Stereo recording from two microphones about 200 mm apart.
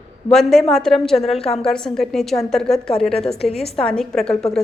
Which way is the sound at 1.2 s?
30° left (ahead or behind).